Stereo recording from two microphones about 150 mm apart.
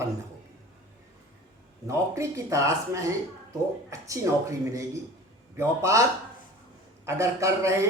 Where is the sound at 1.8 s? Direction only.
20° right (ahead or behind).